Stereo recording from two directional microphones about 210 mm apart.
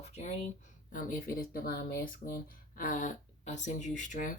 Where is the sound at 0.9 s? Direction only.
40° left (ahead or behind).